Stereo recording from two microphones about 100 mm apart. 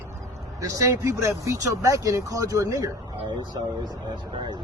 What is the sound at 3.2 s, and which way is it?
Speech, 50° right (ahead or behind).